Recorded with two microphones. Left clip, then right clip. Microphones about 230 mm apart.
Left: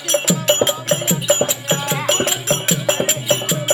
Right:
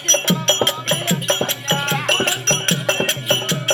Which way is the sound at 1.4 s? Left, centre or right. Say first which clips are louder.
Even; centre.